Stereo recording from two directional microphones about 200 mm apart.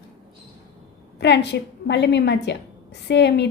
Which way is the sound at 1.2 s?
60° left (ahead or behind).